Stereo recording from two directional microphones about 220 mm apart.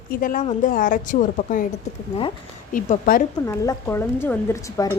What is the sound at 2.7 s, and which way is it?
Speech, 40° left (ahead or behind).